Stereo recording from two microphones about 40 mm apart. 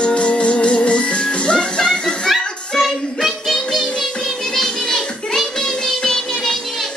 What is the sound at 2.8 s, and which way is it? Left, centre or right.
Music, centre.